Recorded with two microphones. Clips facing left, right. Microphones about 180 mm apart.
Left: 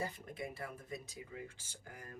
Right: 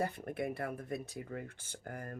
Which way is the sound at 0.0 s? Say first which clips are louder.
Right 6 dB; 60° right (ahead or behind).